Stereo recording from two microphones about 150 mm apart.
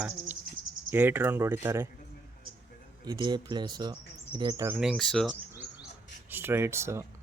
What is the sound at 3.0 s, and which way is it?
Speech, 30° right (ahead or behind).